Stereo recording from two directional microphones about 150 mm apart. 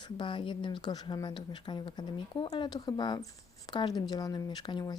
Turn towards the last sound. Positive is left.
turn(degrees=30)  # may be behind; listen again after turning